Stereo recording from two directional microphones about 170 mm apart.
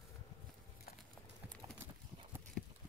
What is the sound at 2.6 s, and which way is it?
Clip-clop, 5° left (ahead or behind).